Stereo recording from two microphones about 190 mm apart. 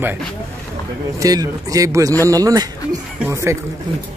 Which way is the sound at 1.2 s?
20° right (ahead or behind).